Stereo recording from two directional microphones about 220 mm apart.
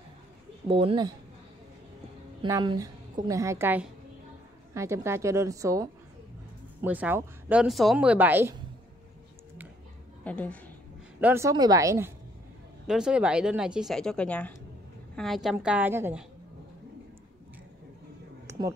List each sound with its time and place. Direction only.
0.7 s speech: 25° right (ahead or behind)
2.4 s speech: 20° right (ahead or behind)
10.2 s a woman's voice: 5° left (ahead or behind)
11.1 s speech: 10° right (ahead or behind)
12.8 s speech: 5° right (ahead or behind)